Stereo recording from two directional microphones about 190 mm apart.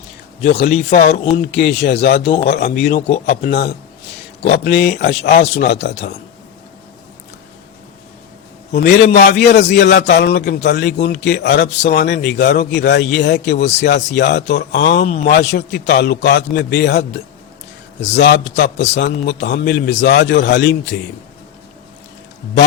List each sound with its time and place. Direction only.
0.6 s a man's voice: 60° left (ahead or behind)
8.7 s a man's voice: 55° left (ahead or behind)
15.0 s a man's voice: 35° left (ahead or behind)
15.3 s a man's voice: 60° left (ahead or behind)